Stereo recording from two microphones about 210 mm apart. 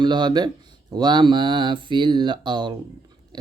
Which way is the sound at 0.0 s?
20° right (ahead or behind).